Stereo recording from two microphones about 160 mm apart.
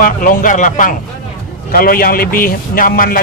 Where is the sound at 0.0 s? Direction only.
60° left (ahead or behind).